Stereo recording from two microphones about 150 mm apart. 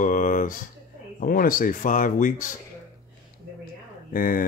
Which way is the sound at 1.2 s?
70° left (ahead or behind).